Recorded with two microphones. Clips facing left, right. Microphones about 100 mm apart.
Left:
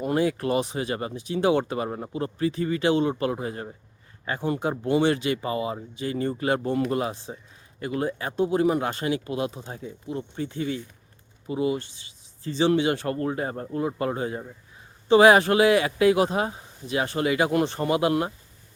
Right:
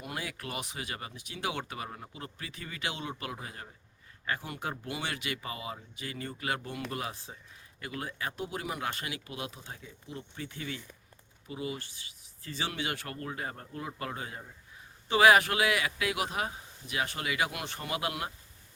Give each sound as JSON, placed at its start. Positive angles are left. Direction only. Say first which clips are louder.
{"t": 0.0, "sound": "speech", "louder": "left 15 dB", "side_deg": 35}